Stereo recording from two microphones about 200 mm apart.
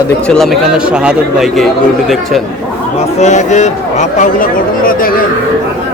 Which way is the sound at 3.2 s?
35° left (ahead or behind).